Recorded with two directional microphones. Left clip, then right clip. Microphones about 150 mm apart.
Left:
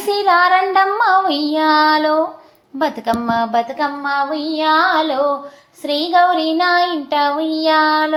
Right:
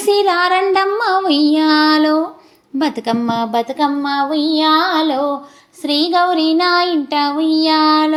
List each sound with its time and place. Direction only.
0.1 s child singing: 30° right (ahead or behind)
2.7 s music: 35° right (ahead or behind)
5.8 s child singing: 30° right (ahead or behind)